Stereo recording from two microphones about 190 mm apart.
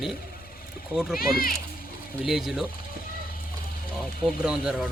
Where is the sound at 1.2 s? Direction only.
50° left (ahead or behind).